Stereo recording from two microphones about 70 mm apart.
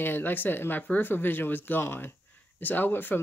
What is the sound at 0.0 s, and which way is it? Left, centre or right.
Speech, left.